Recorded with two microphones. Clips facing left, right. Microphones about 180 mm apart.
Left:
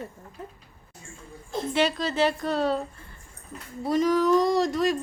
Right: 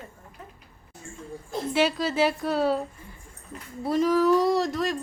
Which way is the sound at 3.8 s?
Centre (ahead or behind).